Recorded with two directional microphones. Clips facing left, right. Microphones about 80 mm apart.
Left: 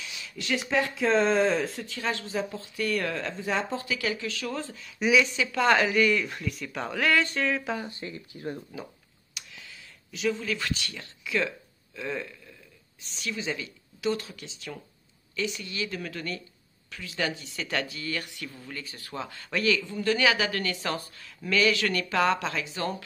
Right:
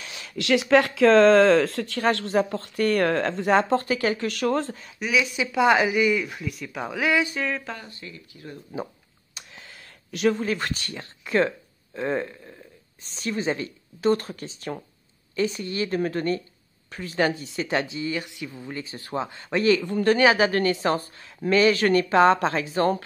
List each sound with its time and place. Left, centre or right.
0.0 s a sound: right
0.4 s speech: right
2.0 s a woman's voice: right
3.8 s a woman's voice: right
4.2 s a woman's voice: right
5.0 s speech: centre
7.9 s speech: left
9.3 s a sound: right
13.0 s a woman's voice: right
19.8 s a man's voice: right
20.2 s a woman's voice: right